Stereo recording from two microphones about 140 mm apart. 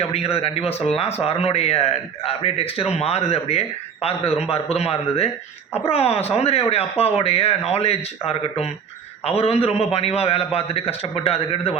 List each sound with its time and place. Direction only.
0.0 s a man's voice: 45° left (ahead or behind)